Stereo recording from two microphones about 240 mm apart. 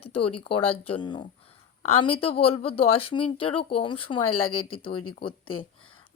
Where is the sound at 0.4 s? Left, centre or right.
Left.